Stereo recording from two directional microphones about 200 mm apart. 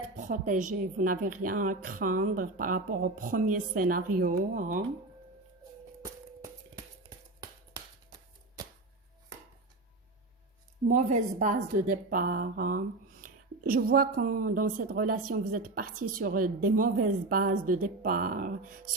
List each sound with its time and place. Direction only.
0.2 s a woman's voice: 40° right (ahead or behind)
10.8 s a woman's voice: 40° right (ahead or behind)